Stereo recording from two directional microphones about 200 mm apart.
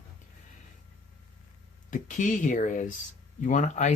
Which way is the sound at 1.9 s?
40° left (ahead or behind).